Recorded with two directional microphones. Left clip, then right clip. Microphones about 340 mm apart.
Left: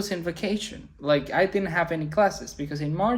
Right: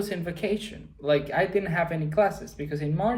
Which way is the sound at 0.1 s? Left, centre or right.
Left.